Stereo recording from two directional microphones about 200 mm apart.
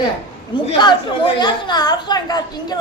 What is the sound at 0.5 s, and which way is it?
A woman's voice, 20° left (ahead or behind).